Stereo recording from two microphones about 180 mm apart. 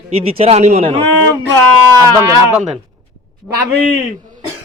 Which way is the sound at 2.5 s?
5° right (ahead or behind).